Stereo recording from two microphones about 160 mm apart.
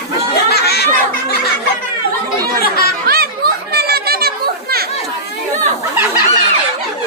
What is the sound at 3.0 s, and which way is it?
Chatter, 70° right (ahead or behind).